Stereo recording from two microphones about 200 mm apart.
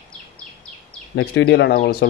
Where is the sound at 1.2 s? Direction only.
60° left (ahead or behind).